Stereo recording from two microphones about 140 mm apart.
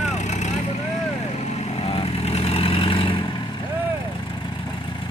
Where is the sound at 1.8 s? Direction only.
45° left (ahead or behind).